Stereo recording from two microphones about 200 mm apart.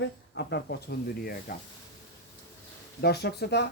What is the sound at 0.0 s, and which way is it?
Speech, 55° left (ahead or behind).